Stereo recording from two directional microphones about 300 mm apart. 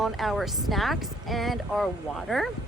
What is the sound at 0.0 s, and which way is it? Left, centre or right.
Speech, centre.